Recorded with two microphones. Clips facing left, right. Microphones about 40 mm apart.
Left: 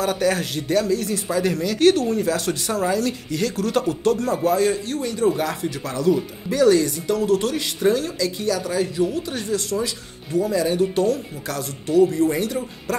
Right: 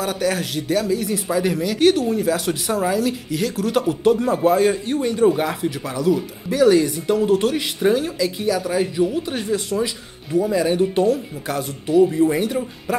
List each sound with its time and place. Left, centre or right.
0.0 s a man's voice: centre